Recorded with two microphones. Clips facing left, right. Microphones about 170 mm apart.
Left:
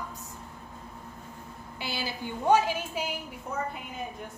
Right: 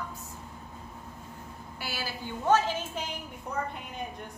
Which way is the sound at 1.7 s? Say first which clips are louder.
Left 3 dB; 20° left (ahead or behind).